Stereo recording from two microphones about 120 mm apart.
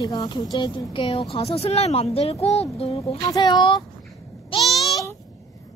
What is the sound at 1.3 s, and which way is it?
Speech, 55° left (ahead or behind).